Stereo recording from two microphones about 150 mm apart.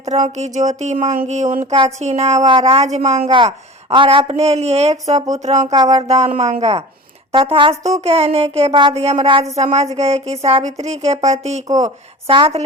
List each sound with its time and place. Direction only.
0.0 s a woman's voice: 45° right (ahead or behind)
12.3 s speech: 40° right (ahead or behind)